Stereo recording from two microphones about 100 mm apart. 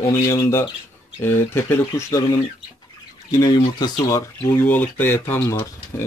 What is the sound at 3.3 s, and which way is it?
Speech, 40° left (ahead or behind).